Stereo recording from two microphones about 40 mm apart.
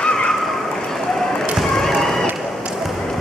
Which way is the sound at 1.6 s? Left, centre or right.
Centre.